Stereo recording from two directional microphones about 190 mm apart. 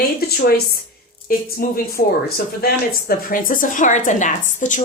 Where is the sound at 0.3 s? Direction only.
55° left (ahead or behind).